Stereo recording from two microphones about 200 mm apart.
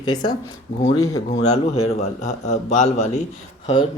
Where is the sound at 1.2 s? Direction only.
35° left (ahead or behind).